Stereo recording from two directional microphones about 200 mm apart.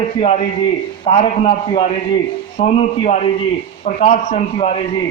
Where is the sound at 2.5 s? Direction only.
35° left (ahead or behind).